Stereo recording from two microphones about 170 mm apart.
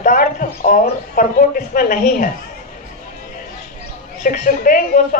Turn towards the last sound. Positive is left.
turn(degrees=55)  # may be behind; listen again after turning